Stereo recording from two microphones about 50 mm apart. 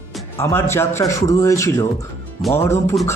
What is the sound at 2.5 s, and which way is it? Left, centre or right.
Speech, left.